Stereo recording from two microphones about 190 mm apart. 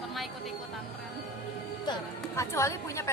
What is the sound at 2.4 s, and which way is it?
Speech, 15° left (ahead or behind).